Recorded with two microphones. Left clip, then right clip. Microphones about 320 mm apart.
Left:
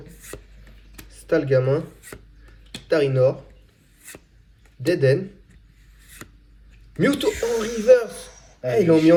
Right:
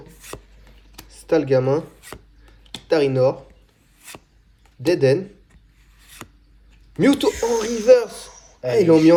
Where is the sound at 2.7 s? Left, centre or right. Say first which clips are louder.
Right 2 dB; centre.